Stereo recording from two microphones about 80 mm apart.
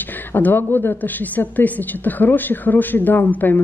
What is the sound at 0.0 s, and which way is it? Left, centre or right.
A woman's voice, left.